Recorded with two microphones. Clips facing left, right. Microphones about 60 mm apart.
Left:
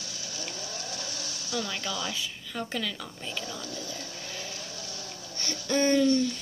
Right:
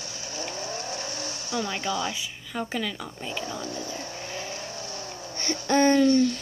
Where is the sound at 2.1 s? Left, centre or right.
Centre.